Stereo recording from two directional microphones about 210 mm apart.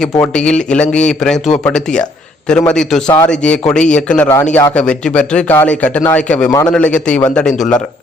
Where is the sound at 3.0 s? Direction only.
20° left (ahead or behind).